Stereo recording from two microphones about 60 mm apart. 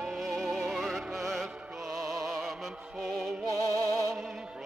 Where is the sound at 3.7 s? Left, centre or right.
Right.